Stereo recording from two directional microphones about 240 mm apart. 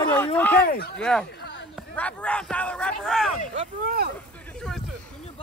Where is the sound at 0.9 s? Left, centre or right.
Centre.